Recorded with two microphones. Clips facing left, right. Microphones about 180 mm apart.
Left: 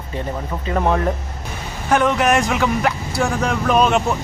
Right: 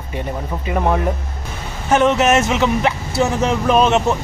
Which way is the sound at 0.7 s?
5° right (ahead or behind).